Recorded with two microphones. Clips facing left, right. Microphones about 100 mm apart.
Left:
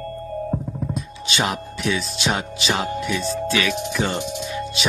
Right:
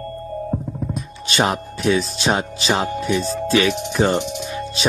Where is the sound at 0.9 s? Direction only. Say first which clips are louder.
Right 1 dB; 45° right (ahead or behind).